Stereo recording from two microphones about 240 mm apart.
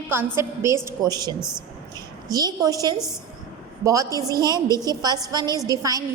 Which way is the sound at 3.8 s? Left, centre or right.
Centre.